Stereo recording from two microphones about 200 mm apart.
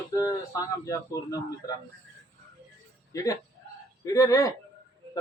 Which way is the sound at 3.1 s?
15° left (ahead or behind).